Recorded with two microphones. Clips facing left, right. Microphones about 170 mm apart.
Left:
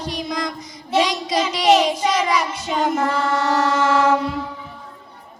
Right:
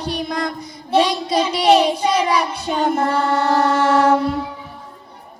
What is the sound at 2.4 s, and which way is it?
Child singing, 60° right (ahead or behind).